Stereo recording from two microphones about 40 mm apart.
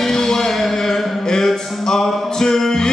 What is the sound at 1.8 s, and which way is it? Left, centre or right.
Speech, centre.